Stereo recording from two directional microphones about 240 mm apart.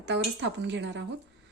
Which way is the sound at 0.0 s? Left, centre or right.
Right.